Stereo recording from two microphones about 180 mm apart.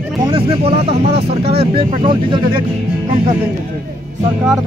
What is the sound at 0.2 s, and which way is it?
Speech, 30° right (ahead or behind).